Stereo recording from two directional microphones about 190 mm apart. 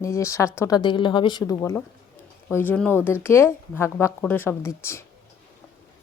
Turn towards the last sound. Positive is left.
turn(degrees=15)  # may be behind; listen again after turning